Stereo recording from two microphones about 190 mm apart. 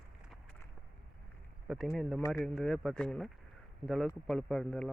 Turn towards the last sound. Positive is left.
turn(degrees=5)  # may be behind; listen again after turning